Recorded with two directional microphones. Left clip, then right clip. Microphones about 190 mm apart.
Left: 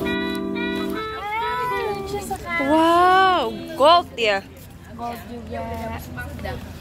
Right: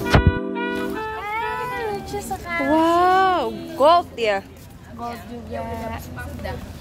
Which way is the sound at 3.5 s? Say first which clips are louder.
Even; 15° right (ahead or behind).